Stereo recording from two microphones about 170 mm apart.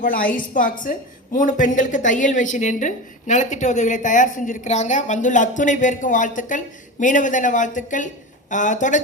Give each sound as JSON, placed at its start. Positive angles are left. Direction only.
{"t": 0.0, "sound": "a woman's voice", "side_deg": 55}